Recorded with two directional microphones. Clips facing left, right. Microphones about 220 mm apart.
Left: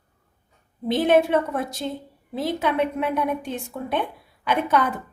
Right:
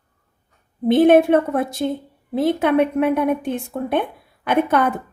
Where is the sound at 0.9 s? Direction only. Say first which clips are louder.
Right 6 dB; 55° right (ahead or behind).